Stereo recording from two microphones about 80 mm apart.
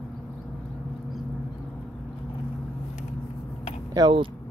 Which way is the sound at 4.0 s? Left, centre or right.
Right.